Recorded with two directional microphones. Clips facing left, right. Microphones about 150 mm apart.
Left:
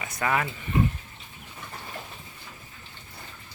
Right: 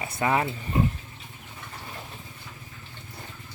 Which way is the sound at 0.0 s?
25° right (ahead or behind).